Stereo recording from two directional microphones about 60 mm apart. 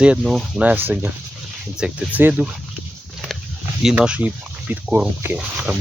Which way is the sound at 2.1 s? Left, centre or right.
Right.